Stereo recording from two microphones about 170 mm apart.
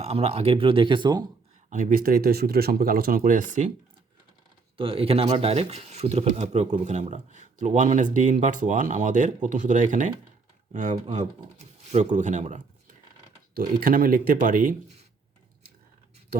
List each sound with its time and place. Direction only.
0.0 s speech: 40° right (ahead or behind)
1.7 s speech: 50° right (ahead or behind)
4.8 s speech: 35° right (ahead or behind); by 14.8 s 50° right (ahead or behind)